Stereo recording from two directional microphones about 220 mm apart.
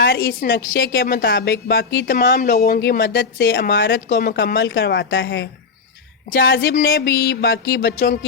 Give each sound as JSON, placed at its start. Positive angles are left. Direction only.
{"t": 0.0, "sound": "speech", "side_deg": 45}
{"t": 6.3, "sound": "speech", "side_deg": 45}